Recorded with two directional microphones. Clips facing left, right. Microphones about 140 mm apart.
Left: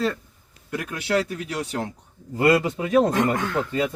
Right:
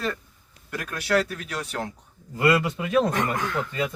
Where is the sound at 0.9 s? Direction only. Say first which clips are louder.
Even; 20° left (ahead or behind).